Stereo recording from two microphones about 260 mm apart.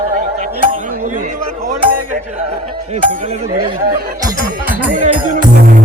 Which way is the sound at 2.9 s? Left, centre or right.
Right.